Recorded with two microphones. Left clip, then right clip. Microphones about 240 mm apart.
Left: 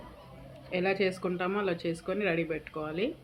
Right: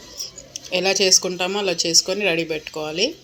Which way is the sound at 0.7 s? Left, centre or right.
Centre.